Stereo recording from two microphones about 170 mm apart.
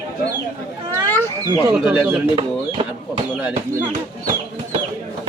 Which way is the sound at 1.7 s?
10° right (ahead or behind).